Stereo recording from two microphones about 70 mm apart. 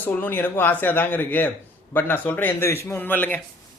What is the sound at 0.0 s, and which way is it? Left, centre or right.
A man's voice, left.